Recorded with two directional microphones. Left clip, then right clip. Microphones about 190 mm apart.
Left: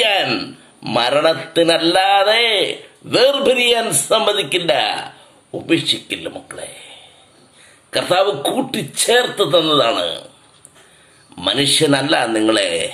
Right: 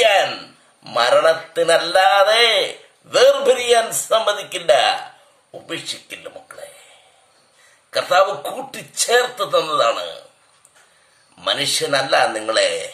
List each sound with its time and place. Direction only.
0.0 s a sound: 10° right (ahead or behind)
0.8 s a man's voice: 15° right (ahead or behind)
7.9 s a man's voice: 20° right (ahead or behind)
11.3 s a man's voice: 20° right (ahead or behind)